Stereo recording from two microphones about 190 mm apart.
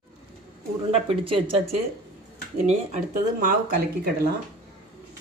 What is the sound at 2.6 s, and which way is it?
Speech, 40° right (ahead or behind).